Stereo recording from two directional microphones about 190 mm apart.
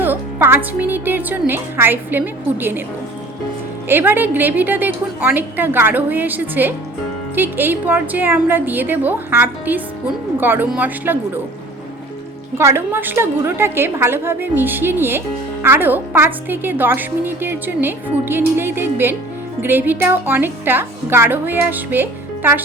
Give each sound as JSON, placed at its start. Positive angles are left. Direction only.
{"t": 0.0, "sound": "a woman's voice", "side_deg": -10}
{"t": 3.8, "sound": "a woman's voice", "side_deg": -10}
{"t": 12.5, "sound": "a woman's voice", "side_deg": -15}